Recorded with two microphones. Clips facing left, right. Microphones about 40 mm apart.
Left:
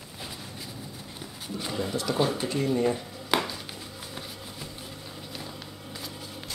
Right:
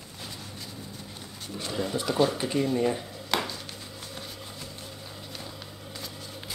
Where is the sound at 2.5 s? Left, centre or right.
Centre.